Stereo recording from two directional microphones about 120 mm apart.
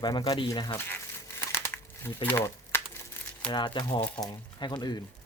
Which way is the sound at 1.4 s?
20° left (ahead or behind).